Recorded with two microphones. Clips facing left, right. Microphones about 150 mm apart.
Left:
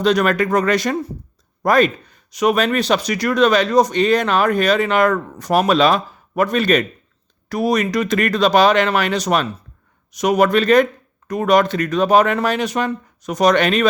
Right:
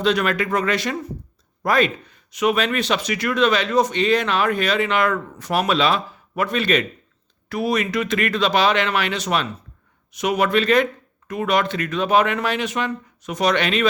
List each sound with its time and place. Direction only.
0.0 s speech: 40° left (ahead or behind)